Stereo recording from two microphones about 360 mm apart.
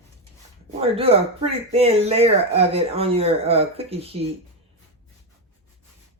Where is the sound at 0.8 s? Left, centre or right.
Centre.